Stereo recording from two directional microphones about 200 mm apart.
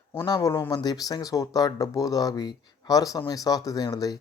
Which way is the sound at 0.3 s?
20° left (ahead or behind).